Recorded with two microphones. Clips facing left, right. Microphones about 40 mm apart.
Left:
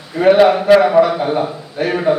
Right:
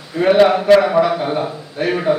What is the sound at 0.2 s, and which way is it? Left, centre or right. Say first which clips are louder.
A man's voice: left 2 dB; centre.